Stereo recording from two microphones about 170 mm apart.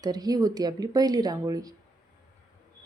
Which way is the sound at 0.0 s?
25° right (ahead or behind).